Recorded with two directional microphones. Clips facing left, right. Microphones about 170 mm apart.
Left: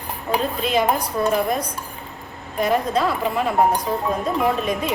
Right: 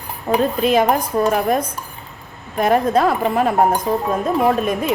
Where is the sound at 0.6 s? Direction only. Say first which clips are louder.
Right 3 dB; 50° right (ahead or behind).